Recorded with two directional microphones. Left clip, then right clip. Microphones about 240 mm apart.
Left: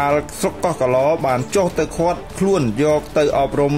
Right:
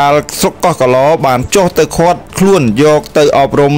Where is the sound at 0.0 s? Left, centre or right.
Right.